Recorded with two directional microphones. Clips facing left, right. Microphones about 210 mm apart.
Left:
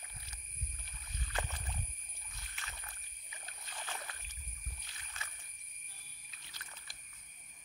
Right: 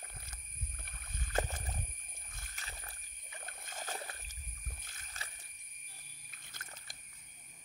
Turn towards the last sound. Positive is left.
turn(degrees=-50)  # may be behind; listen again after turning